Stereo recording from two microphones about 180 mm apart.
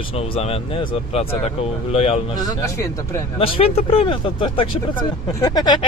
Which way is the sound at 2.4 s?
20° left (ahead or behind).